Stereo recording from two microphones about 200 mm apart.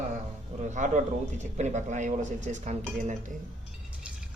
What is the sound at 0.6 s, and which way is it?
A man's voice, 35° right (ahead or behind).